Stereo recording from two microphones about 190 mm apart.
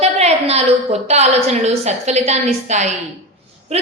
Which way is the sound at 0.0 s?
35° right (ahead or behind).